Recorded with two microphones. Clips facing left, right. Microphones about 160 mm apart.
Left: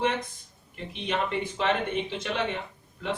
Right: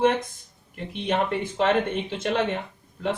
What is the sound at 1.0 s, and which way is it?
Speech, 50° right (ahead or behind).